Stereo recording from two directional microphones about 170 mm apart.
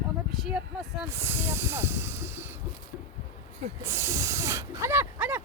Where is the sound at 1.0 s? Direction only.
15° right (ahead or behind).